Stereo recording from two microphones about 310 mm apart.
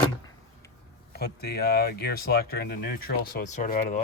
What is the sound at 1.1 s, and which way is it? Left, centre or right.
Speech, left.